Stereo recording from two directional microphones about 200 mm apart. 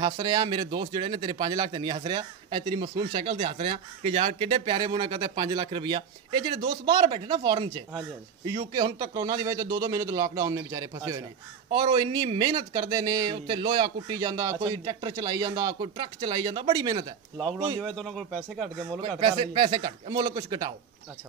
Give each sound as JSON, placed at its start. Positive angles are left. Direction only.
{"t": 0.0, "sound": "a man's voice", "side_deg": -20}
{"t": 17.7, "sound": "speech", "side_deg": 0}
{"t": 18.9, "sound": "speech", "side_deg": -25}